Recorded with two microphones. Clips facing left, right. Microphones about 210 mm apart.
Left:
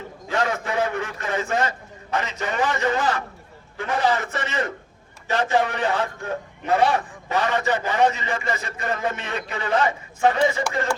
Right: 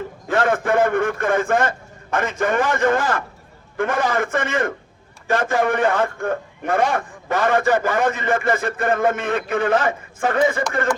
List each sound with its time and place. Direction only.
0.3 s a man's voice: 50° right (ahead or behind)